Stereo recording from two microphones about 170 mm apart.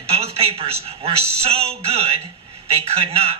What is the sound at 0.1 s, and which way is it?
A man's voice, 35° right (ahead or behind).